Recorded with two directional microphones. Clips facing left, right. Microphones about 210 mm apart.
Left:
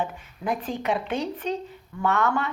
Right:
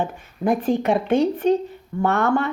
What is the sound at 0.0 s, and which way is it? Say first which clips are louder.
Speech: right 6 dB; 50° right (ahead or behind).